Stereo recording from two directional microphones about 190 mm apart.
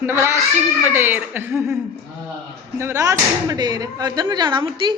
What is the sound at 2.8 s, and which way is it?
Speech, 15° right (ahead or behind).